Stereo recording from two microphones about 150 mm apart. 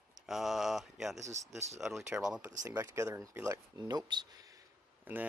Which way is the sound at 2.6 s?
20° right (ahead or behind).